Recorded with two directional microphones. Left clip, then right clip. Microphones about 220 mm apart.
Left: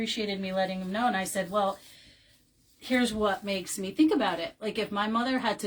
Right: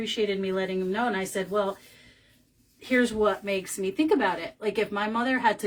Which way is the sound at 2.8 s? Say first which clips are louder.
Right 4 dB; 20° right (ahead or behind).